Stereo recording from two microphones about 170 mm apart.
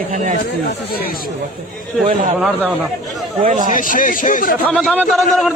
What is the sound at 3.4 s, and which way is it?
Speech, 50° right (ahead or behind).